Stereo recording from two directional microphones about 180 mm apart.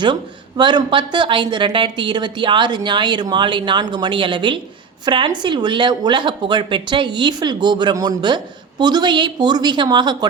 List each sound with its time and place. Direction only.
0.0 s speech: 25° right (ahead or behind)